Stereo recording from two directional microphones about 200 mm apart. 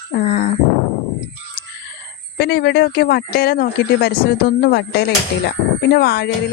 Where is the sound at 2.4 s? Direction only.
55° left (ahead or behind).